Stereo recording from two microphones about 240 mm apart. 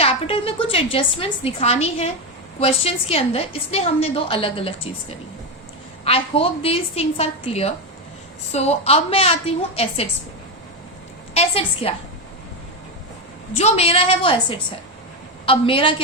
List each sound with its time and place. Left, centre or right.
0.0 s a woman's voice: left
6.1 s a woman's voice: left
11.3 s a woman's voice: left
13.5 s a woman's voice: left
15.4 s a woman's voice: left